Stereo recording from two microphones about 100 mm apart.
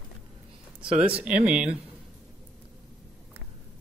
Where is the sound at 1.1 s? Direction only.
15° right (ahead or behind).